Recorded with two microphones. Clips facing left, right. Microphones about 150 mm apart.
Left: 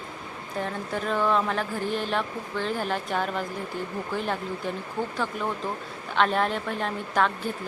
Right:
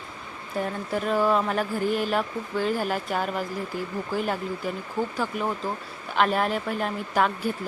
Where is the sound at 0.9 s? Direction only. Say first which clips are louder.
Right 2 dB; 5° right (ahead or behind).